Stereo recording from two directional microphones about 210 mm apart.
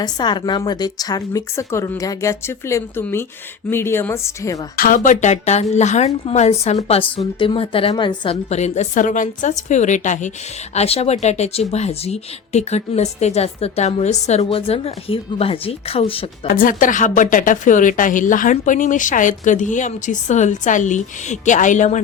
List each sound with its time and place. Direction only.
0.0 s a woman's voice: 20° left (ahead or behind)
4.8 s a woman's voice: 40° left (ahead or behind)
16.5 s a woman's voice: 40° left (ahead or behind)